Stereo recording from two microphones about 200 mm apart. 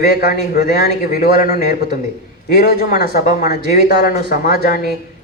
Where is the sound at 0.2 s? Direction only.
50° left (ahead or behind).